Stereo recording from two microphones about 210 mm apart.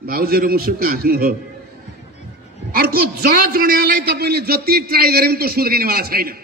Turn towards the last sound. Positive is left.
turn(degrees=-45)  # may be behind; listen again after turning